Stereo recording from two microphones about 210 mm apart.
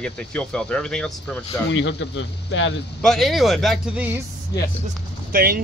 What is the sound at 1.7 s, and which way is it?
Speech, 60° left (ahead or behind).